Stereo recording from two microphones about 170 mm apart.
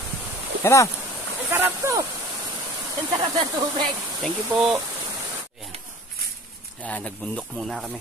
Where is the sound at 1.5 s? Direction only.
15° right (ahead or behind).